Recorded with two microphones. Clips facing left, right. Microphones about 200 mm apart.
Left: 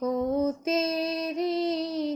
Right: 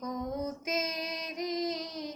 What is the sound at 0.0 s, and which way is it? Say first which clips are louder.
Female singing: left 9 dB; 30° left (ahead or behind).